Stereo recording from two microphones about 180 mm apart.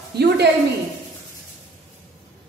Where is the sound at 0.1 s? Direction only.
65° right (ahead or behind).